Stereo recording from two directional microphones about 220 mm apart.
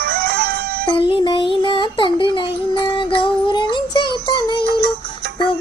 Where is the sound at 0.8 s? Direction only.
25° left (ahead or behind).